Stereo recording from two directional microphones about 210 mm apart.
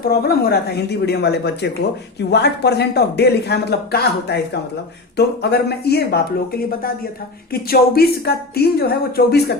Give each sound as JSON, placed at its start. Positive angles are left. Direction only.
{"t": 0.0, "sound": "speech", "side_deg": 45}
{"t": 7.5, "sound": "speech", "side_deg": 45}